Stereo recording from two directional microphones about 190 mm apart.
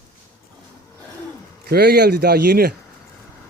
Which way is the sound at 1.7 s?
55° right (ahead or behind).